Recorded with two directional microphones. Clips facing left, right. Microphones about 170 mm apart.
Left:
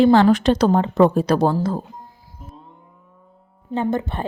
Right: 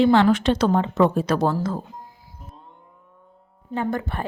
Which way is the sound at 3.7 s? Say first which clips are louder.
Left 3 dB; 20° left (ahead or behind).